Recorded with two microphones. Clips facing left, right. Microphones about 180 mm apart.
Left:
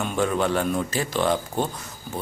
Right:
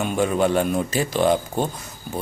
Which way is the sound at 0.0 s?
15° right (ahead or behind).